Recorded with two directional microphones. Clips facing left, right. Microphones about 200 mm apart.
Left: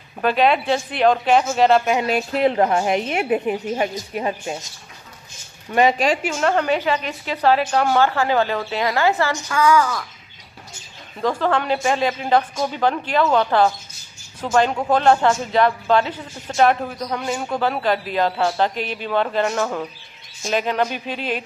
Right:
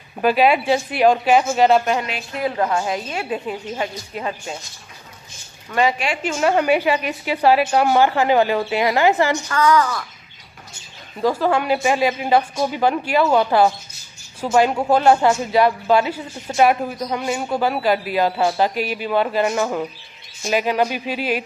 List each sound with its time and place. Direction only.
0.2 s speech: 5° right (ahead or behind)
2.3 s a woman's voice: 25° left (ahead or behind)
5.7 s a woman's voice: 20° left (ahead or behind)
6.3 s speech: 10° right (ahead or behind)
9.5 s a woman's voice: 10° left (ahead or behind)
11.1 s speech: 10° right (ahead or behind)